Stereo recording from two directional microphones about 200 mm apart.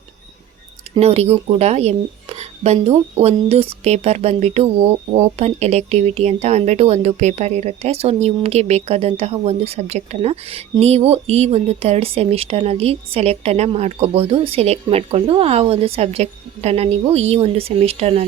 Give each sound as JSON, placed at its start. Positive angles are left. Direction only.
{"t": 0.9, "sound": "speech", "side_deg": -30}